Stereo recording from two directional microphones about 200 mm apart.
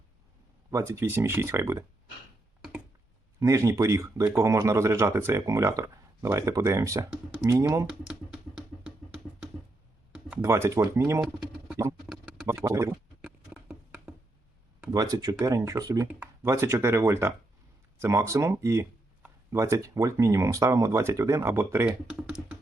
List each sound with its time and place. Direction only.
0.7 s speech: 15° right (ahead or behind)
3.4 s speech: 15° right (ahead or behind)
8.0 s a sound: 5° right (ahead or behind)
10.1 s speech: 5° right (ahead or behind)
11.2 s typing: 5° right (ahead or behind)
12.0 s a sound: centre (ahead or behind)
12.6 s speech: 15° right (ahead or behind)
13.2 s a sound: 5° right (ahead or behind)
14.8 s speech: 20° right (ahead or behind)